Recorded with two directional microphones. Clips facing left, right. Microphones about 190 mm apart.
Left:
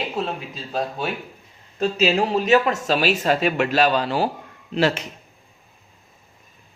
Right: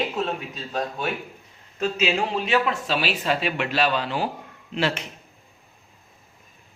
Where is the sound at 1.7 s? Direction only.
35° left (ahead or behind).